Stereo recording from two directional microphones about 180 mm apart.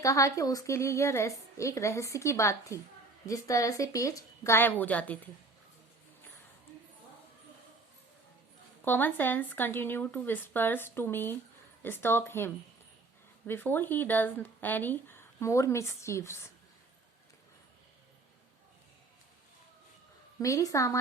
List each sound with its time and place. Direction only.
0.0 s speech: 15° left (ahead or behind)
8.8 s speech: 10° left (ahead or behind)
13.5 s speech: 10° left (ahead or behind)
20.4 s speech: 15° left (ahead or behind)